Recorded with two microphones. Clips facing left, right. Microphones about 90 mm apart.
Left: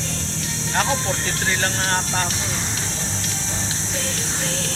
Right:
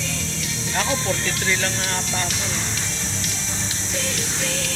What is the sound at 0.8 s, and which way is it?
Speech, 35° left (ahead or behind).